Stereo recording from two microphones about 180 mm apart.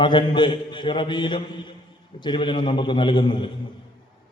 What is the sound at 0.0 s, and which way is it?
A man's voice, 25° left (ahead or behind).